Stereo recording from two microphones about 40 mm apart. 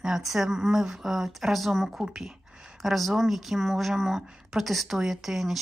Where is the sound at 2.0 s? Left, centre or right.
Centre.